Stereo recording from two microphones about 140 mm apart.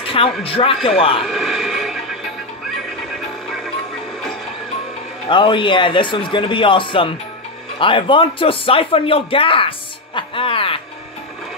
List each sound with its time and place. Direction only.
0.0 s speech: 40° left (ahead or behind)
1.2 s a sound: centre (ahead or behind)
3.1 s music: 5° left (ahead or behind)
5.3 s speech: 35° left (ahead or behind)